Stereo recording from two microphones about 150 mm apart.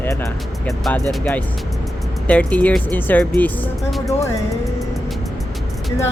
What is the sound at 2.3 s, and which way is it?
Speech, 10° left (ahead or behind).